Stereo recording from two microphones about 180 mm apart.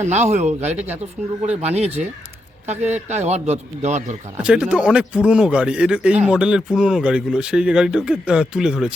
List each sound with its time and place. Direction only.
0.0 s a man's voice: 40° right (ahead or behind)
4.4 s speech: 5° right (ahead or behind)